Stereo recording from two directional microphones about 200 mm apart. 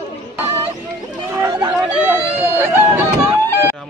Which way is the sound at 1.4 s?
20° right (ahead or behind).